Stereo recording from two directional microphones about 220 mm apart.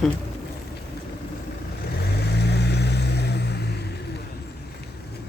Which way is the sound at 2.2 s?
50° left (ahead or behind).